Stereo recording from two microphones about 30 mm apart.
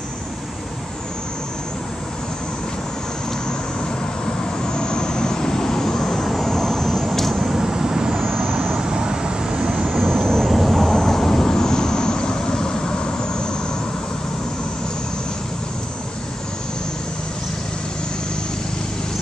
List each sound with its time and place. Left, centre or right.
4.6 s vehicle: left
7.2 s vehicle: centre
7.4 s vehicle: centre
8.2 s vehicle: centre
8.8 s vehicle: right
10.0 s vehicle: centre
10.5 s vehicle: centre; by 13.6 s left